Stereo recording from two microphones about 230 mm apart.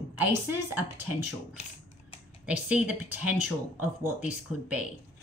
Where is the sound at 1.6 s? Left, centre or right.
Left.